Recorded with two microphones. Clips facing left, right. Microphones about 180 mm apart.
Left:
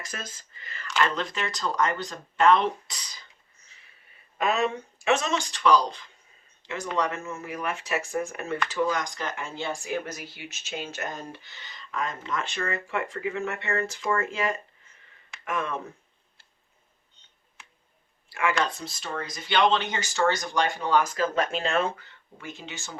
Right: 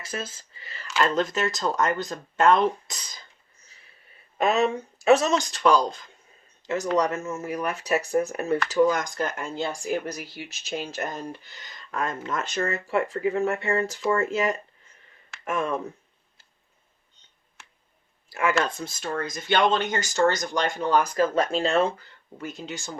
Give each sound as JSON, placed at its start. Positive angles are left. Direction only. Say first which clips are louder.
{"t": 0.0, "sound": "speech", "louder": "right 6 dB", "side_deg": -30}
{"t": 0.9, "sound": "speech", "louder": "right 4 dB", "side_deg": -40}
{"t": 4.4, "sound": "speech", "louder": "right 3 dB", "side_deg": -40}
{"t": 11.6, "sound": "speech", "louder": "right 2 dB", "side_deg": -50}
{"t": 18.3, "sound": "speech", "louder": "right 2 dB", "side_deg": -40}